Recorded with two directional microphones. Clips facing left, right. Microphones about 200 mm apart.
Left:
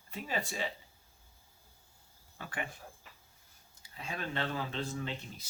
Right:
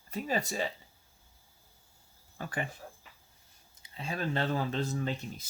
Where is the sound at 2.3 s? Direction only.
40° right (ahead or behind).